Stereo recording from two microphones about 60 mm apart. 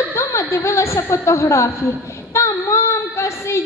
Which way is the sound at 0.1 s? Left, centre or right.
Left.